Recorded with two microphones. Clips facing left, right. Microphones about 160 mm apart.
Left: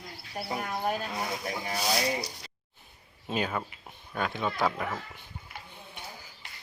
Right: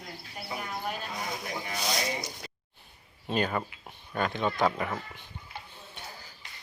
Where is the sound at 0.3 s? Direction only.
45° left (ahead or behind).